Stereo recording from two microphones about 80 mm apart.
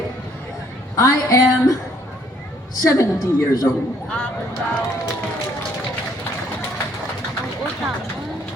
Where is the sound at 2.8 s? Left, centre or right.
Left.